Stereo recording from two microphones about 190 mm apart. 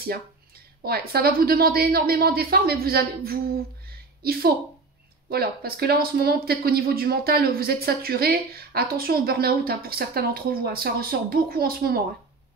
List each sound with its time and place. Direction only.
0.8 s speech: 55° right (ahead or behind)
3.8 s a sound: 55° right (ahead or behind)
5.3 s speech: 55° right (ahead or behind)